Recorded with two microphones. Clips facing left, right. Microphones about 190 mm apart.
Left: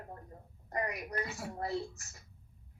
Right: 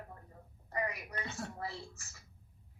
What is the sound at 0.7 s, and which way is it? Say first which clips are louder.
Speech: left 2 dB; 40° left (ahead or behind).